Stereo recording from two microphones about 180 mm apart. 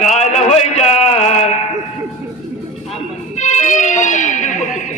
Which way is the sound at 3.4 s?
40° left (ahead or behind).